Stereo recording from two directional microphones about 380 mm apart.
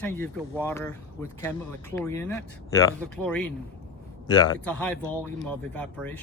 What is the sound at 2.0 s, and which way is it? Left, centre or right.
Speech, centre.